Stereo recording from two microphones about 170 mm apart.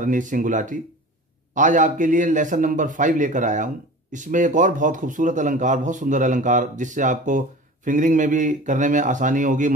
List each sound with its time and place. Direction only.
0.0 s a man's voice: 50° right (ahead or behind)